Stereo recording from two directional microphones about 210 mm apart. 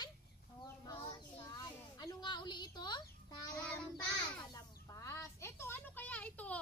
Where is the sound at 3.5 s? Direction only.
5° left (ahead or behind).